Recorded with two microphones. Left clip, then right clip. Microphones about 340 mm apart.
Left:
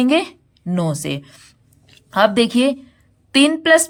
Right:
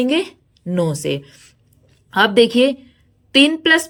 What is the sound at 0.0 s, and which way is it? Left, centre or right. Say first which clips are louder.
A woman's voice: left 2 dB; centre.